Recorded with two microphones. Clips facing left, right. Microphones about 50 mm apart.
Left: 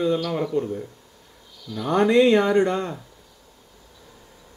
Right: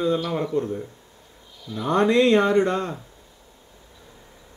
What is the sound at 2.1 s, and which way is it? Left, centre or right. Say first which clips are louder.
Speech: left 2 dB; centre.